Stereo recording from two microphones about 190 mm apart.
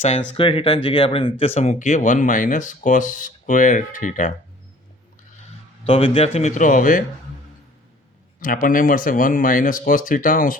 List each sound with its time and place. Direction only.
0.3 s speech: 30° left (ahead or behind)
5.8 s speech: 30° left (ahead or behind)
8.4 s speech: 45° left (ahead or behind)